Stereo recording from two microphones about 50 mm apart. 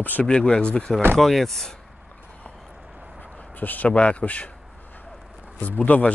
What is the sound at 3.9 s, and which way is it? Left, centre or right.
Speech, left.